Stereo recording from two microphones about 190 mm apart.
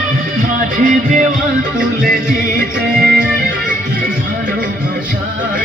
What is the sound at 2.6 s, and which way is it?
Music, 50° right (ahead or behind).